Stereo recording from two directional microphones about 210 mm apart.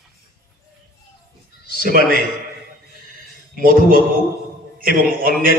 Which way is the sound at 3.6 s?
40° right (ahead or behind).